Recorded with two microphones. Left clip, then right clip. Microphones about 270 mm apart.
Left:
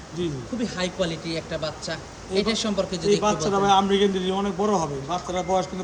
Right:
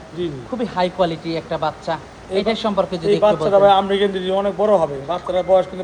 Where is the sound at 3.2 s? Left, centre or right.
Left.